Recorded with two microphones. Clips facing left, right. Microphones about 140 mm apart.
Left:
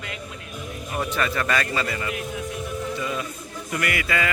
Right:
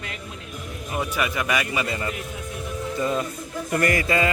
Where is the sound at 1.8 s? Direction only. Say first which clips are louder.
Right 1 dB; 25° right (ahead or behind).